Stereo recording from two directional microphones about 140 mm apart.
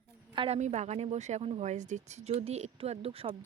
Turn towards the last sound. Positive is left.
turn(degrees=-45)  # may be behind; listen again after turning